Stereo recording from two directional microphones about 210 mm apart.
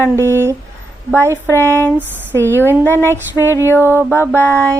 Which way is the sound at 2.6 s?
10° left (ahead or behind).